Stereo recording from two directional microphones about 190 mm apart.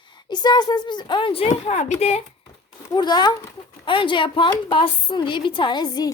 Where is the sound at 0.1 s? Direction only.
20° left (ahead or behind).